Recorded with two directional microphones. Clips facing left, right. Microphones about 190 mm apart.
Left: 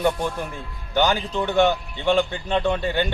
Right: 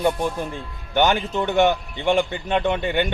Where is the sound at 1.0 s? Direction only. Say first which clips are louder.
Right 1 dB; 20° right (ahead or behind).